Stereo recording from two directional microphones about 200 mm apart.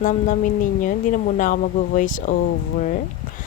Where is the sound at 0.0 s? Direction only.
40° left (ahead or behind).